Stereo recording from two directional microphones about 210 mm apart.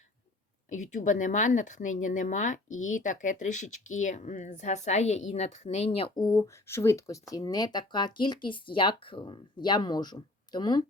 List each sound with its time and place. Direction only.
0.7 s speech: 35° left (ahead or behind)
6.1 s speech: 15° left (ahead or behind)